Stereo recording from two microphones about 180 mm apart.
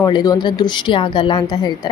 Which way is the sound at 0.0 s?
20° left (ahead or behind).